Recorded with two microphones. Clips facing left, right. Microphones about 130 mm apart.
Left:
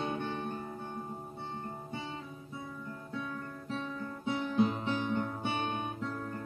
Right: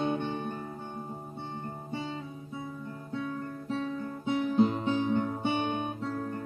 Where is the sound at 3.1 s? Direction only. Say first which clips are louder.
Right 6 dB; 30° right (ahead or behind).